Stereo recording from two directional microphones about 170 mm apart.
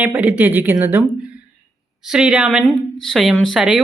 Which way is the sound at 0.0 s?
10° right (ahead or behind).